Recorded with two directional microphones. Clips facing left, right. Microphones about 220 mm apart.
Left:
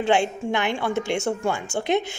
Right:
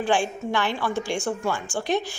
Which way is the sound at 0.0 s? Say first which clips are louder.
Left 2 dB; 25° left (ahead or behind).